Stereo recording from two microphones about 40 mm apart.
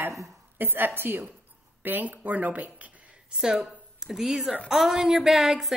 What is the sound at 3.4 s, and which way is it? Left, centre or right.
A woman's voice, centre.